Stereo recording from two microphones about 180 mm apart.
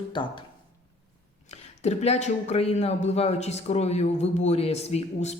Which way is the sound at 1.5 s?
35° left (ahead or behind).